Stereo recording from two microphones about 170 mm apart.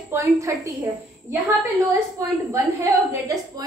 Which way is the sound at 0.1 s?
15° right (ahead or behind).